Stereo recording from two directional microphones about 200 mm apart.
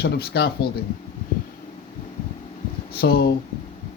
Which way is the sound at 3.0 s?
50° left (ahead or behind).